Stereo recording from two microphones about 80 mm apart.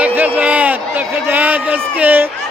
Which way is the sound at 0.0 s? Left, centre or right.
Centre.